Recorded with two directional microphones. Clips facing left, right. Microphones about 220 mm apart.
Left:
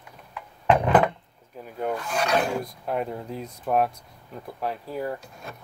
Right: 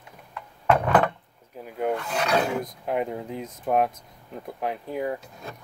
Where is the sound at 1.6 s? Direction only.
10° right (ahead or behind).